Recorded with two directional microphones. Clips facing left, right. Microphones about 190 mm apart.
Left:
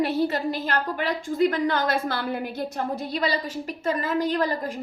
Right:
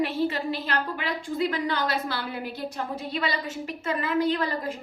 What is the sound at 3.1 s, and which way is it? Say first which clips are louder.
A woman's voice: left 2 dB; 35° left (ahead or behind).